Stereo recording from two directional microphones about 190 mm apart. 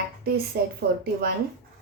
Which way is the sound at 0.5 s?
55° right (ahead or behind).